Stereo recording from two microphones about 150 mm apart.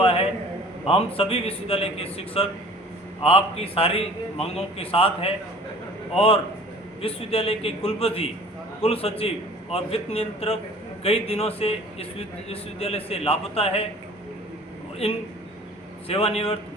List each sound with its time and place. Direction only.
0.0 s a sound: 40° left (ahead or behind)
0.9 s a man's voice: 40° left (ahead or behind)
16.0 s a man's voice: 40° left (ahead or behind)